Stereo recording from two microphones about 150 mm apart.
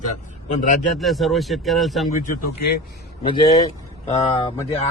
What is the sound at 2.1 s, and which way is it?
Speech, 65° left (ahead or behind).